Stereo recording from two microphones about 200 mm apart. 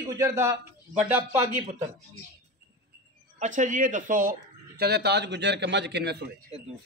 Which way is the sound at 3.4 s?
40° right (ahead or behind).